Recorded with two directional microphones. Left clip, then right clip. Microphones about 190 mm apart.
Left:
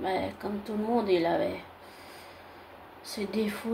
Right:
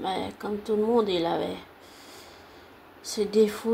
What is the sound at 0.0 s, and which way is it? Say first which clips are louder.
Speech: even; 35° right (ahead or behind).